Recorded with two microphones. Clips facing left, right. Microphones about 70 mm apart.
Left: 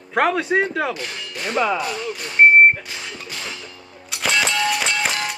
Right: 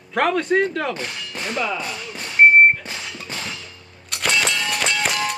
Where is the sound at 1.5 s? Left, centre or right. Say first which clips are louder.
Left 5 dB; left.